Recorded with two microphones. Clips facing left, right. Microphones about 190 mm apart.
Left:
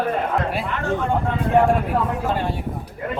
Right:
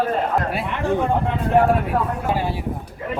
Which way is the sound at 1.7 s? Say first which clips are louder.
Even; 5° right (ahead or behind).